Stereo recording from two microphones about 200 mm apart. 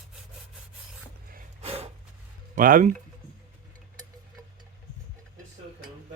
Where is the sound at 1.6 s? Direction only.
30° right (ahead or behind).